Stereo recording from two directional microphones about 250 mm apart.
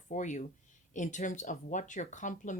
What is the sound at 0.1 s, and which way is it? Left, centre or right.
Speech, left.